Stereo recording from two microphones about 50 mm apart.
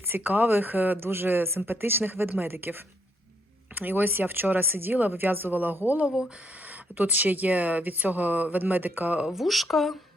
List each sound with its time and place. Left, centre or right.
0.2 s speech: right
6.1 s speech: centre
6.7 s speech: right
9.2 s speech: centre